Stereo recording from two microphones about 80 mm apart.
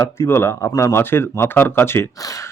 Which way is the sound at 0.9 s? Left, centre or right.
Left.